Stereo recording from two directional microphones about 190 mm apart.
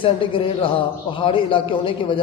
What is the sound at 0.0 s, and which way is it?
A man's voice, 25° left (ahead or behind).